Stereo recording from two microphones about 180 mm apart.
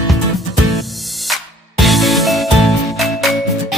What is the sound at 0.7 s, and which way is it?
Music, centre (ahead or behind).